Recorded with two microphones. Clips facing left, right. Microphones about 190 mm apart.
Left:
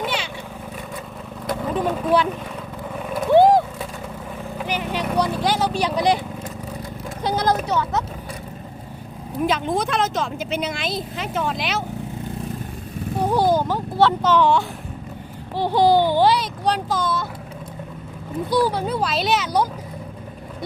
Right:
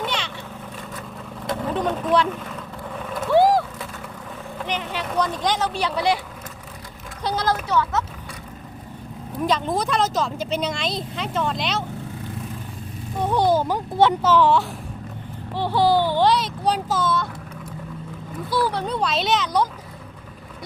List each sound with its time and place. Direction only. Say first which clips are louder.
0.0 s vehicle: left 2 dB; 5° left (ahead or behind)
1.5 s speech: left 1 dB; 5° left (ahead or behind)
3.2 s vehicle: left 3 dB; 20° left (ahead or behind)
4.5 s speech: left 2 dB; 10° left (ahead or behind)
7.2 s speech: left 3 dB; 15° left (ahead or behind)
9.5 s speech: right 1 dB; centre (ahead or behind)
13.2 s a sound: left 1 dB; 5° left (ahead or behind)
13.7 s speech: even; 15° right (ahead or behind)
14.3 s speech: even; centre (ahead or behind)
15.5 s speech: left 3 dB; 15° left (ahead or behind); by 17.2 s centre (ahead or behind)
18.5 s speech: left 3 dB; 10° left (ahead or behind)